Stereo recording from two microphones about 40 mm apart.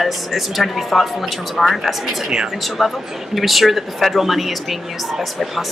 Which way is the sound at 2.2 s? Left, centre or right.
Right.